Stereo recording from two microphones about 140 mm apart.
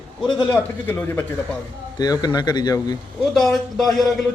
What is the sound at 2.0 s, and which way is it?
Speech, 30° left (ahead or behind).